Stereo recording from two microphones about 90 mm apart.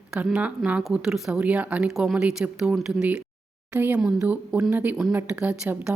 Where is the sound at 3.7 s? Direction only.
20° right (ahead or behind).